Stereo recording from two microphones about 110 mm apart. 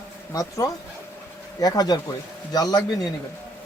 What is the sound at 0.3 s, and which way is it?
A man's voice, 35° left (ahead or behind).